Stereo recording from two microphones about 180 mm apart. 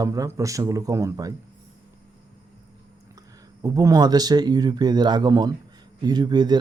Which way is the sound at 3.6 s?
20° right (ahead or behind).